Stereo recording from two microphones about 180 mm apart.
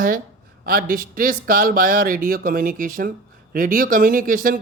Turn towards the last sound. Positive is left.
turn(degrees=-50)  # may be behind; listen again after turning